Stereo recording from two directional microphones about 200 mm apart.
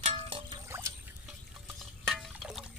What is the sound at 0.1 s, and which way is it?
Music, 25° right (ahead or behind).